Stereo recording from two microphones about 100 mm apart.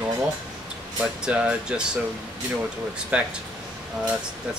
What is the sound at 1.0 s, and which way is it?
Speech, 10° right (ahead or behind).